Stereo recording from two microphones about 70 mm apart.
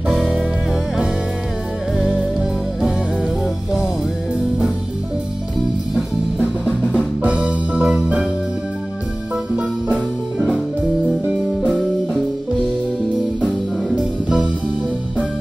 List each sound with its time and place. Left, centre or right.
2.0 s music: centre
7.2 s music: centre
9.6 s music: centre
13.8 s music: centre